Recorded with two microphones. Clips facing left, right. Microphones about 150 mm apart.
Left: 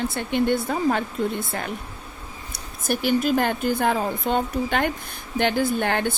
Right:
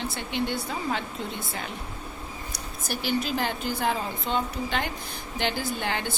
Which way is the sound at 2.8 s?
55° left (ahead or behind).